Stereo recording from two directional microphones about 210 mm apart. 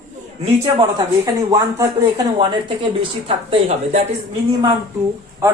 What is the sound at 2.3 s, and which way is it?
Speech, 25° right (ahead or behind).